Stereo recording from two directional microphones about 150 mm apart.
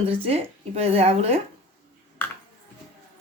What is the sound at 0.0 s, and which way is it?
A woman's voice, 40° right (ahead or behind).